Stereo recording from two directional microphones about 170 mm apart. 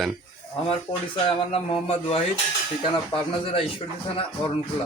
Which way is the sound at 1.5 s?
35° left (ahead or behind).